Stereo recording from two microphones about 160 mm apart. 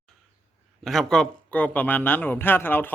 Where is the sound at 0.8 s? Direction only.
Centre (ahead or behind).